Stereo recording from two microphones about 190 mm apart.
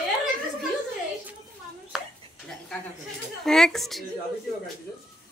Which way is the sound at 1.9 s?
Centre (ahead or behind).